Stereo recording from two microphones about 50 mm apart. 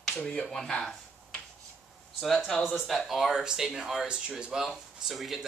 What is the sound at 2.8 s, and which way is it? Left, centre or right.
Speech, centre.